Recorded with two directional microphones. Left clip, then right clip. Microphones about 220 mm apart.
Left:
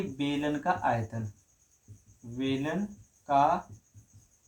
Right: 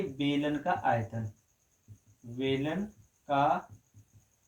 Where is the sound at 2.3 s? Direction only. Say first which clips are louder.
Right 1 dB; 25° left (ahead or behind).